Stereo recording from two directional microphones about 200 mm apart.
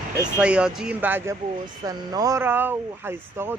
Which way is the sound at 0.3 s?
5° right (ahead or behind).